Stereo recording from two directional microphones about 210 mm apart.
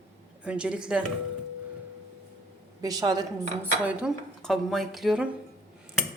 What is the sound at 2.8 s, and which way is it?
Speech, 20° right (ahead or behind).